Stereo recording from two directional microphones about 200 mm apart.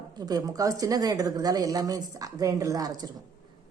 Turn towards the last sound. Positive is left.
turn(degrees=-20)  # may be behind; listen again after turning